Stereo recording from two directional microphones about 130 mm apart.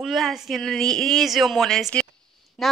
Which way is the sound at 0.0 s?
Centre (ahead or behind).